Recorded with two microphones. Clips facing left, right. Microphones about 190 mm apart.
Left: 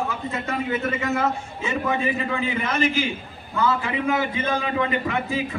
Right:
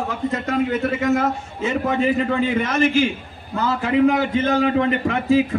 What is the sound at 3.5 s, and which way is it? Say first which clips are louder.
A man's voice: right 4 dB; 45° right (ahead or behind).